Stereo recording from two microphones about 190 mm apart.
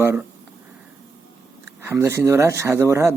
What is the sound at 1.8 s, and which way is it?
Speech, 15° right (ahead or behind).